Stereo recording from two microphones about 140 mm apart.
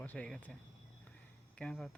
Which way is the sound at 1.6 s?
5° left (ahead or behind).